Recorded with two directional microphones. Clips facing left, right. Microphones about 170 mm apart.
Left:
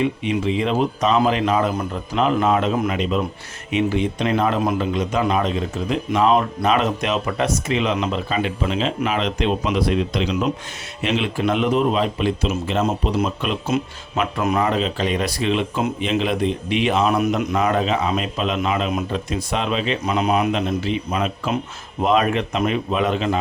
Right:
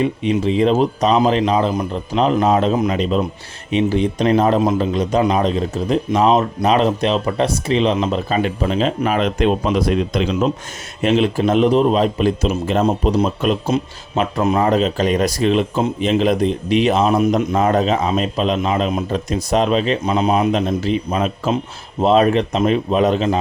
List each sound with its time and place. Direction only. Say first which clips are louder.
0.0 s speech: right 3 dB; 35° right (ahead or behind)